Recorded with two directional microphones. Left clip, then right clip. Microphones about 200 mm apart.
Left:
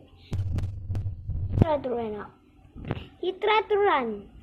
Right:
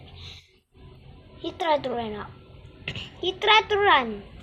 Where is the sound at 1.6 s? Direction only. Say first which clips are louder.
Right 2 dB; 15° right (ahead or behind).